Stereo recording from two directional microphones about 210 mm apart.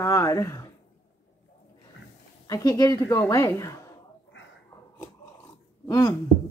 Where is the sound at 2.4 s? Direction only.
15° left (ahead or behind).